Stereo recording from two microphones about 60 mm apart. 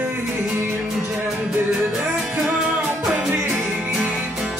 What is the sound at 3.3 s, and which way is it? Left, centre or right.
Music, right.